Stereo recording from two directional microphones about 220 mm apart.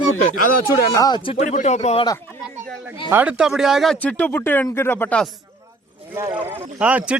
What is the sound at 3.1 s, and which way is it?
Speech, 5° right (ahead or behind).